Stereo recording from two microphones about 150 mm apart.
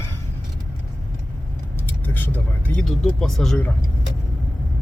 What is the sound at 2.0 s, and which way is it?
Speech, 10° left (ahead or behind).